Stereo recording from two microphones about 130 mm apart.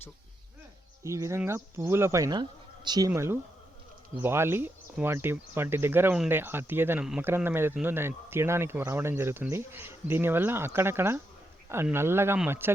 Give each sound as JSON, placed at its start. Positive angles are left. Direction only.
{"t": 1.0, "sound": "speech", "side_deg": -25}
{"t": 3.1, "sound": "speech", "side_deg": -20}